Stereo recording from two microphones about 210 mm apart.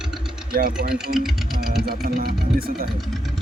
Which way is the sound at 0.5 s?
45° right (ahead or behind).